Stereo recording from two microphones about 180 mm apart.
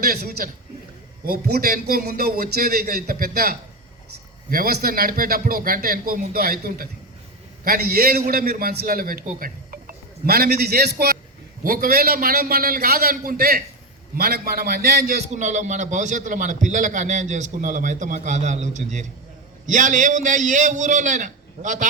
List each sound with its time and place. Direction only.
0.0 s a man's voice: 55° right (ahead or behind)
15.3 s a man's voice: 40° right (ahead or behind)